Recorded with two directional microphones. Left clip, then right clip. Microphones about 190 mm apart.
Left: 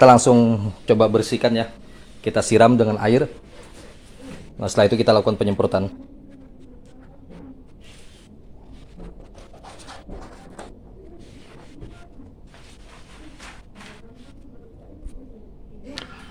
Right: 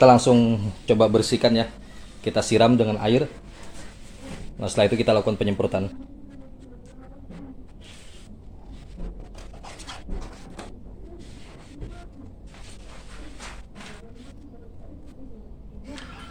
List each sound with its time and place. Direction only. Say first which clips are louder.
0.0 s speech: left 3 dB; 30° left (ahead or behind); by 1.6 s 10° left (ahead or behind)
2.2 s speech: left 4 dB; 30° left (ahead or behind)
4.6 s speech: left 4 dB; 40° left (ahead or behind)